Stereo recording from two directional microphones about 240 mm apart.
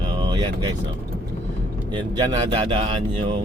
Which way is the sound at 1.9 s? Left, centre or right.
Centre.